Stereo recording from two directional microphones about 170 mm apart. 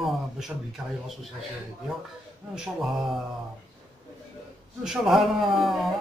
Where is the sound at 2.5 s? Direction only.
5° right (ahead or behind).